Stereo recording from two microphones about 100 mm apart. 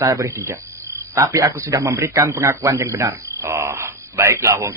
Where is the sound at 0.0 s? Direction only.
30° right (ahead or behind).